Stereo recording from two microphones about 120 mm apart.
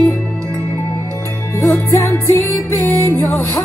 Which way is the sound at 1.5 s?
25° left (ahead or behind).